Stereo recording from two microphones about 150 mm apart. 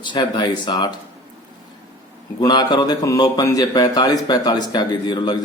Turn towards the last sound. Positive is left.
turn(degrees=30)  # may be behind; listen again after turning